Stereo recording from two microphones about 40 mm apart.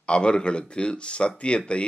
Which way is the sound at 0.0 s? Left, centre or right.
Left.